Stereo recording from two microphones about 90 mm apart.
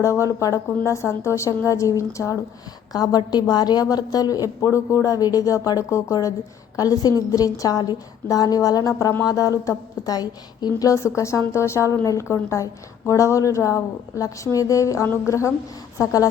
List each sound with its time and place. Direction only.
0.0 s a woman's voice: 35° left (ahead or behind)
2.9 s a woman's voice: 45° left (ahead or behind)